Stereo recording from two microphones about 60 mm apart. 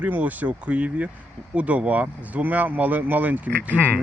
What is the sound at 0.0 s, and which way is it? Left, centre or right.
Speech, right.